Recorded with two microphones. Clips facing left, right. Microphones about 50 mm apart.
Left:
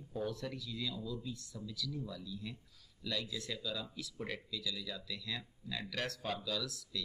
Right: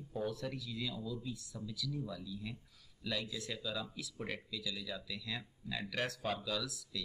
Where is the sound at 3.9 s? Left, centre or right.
Centre.